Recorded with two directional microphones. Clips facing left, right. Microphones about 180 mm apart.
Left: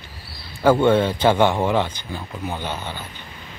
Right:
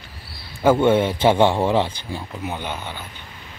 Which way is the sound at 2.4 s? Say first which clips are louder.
Left 2 dB; 10° right (ahead or behind).